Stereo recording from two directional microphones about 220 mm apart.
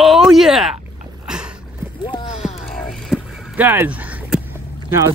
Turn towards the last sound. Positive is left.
turn(degrees=-15)  # may be behind; listen again after turning